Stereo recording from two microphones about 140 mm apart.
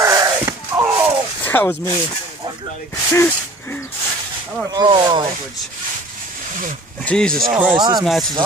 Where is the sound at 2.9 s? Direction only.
20° left (ahead or behind).